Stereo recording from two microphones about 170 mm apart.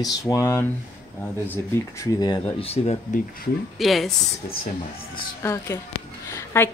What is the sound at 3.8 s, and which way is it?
Speech, centre (ahead or behind).